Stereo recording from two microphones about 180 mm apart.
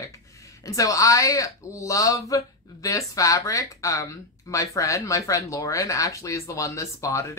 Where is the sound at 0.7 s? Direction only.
20° left (ahead or behind).